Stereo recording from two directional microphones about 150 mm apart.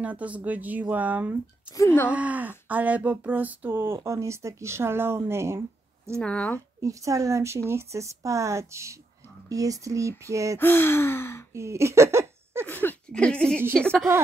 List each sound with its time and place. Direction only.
0.0 s speech: 10° right (ahead or behind)
6.1 s speech: 5° left (ahead or behind)
6.8 s speech: 20° right (ahead or behind)
10.6 s gasp: 15° left (ahead or behind)
11.5 s a sound: 20° right (ahead or behind)
12.6 s a sound: 10° left (ahead or behind)
13.7 s a woman's voice: 5° left (ahead or behind)